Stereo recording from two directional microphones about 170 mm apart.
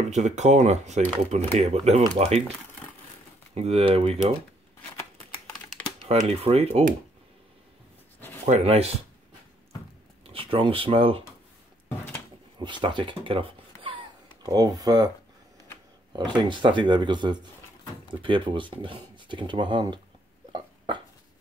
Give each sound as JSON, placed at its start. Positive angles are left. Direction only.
{"t": 0.1, "sound": "speech", "side_deg": -40}
{"t": 3.5, "sound": "speech", "side_deg": -35}
{"t": 6.2, "sound": "speech", "side_deg": -35}
{"t": 8.5, "sound": "speech", "side_deg": -40}
{"t": 10.2, "sound": "speech", "side_deg": -35}
{"t": 12.5, "sound": "speech", "side_deg": -30}
{"t": 16.3, "sound": "speech", "side_deg": -25}
{"t": 20.5, "sound": "a sound", "side_deg": -25}